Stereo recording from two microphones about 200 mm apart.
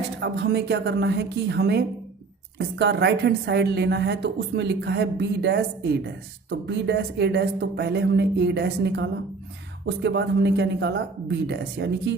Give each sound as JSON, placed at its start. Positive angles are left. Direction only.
{"t": 0.2, "sound": "a woman's voice", "side_deg": -55}